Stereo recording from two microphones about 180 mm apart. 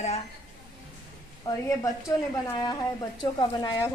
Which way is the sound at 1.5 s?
20° left (ahead or behind).